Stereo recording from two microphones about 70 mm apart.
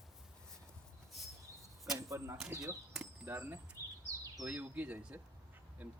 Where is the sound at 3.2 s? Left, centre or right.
Right.